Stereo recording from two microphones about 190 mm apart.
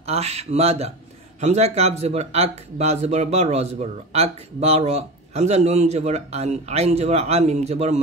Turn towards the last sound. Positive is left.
turn(degrees=-35)  # may be behind; listen again after turning